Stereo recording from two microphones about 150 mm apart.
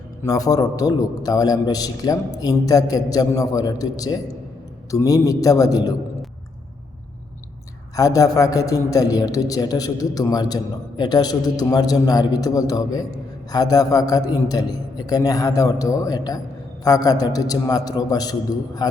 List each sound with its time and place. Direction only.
0.3 s a man's voice: 25° left (ahead or behind)
7.9 s a man's voice: 25° left (ahead or behind)